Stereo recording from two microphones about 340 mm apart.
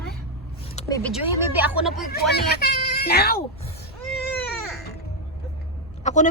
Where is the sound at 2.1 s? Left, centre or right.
Left.